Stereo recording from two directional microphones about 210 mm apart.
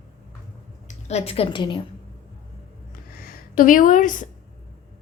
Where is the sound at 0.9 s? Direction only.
30° left (ahead or behind).